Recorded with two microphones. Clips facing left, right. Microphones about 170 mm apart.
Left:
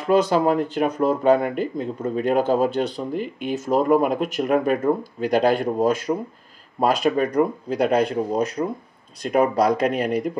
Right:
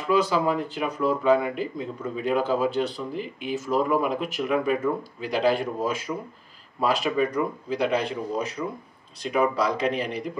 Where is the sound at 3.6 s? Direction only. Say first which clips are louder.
Left 5 dB; 45° left (ahead or behind).